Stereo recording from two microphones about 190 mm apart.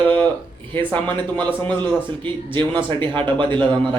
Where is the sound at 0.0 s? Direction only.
10° left (ahead or behind).